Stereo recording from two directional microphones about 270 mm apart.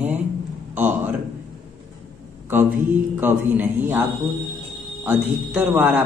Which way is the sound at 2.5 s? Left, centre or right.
Centre.